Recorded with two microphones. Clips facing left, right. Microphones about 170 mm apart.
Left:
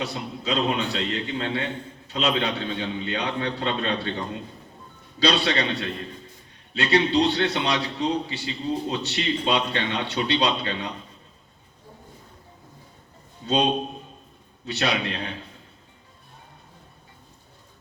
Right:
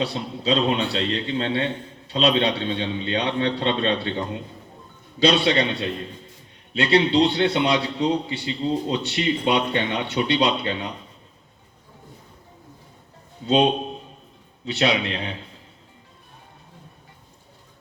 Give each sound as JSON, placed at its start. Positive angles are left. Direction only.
{"t": 0.0, "sound": "a man's voice", "side_deg": -30}
{"t": 5.2, "sound": "a man's voice", "side_deg": -25}
{"t": 14.7, "sound": "a man's voice", "side_deg": -25}